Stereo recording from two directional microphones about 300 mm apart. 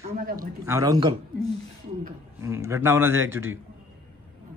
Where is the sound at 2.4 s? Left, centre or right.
Centre.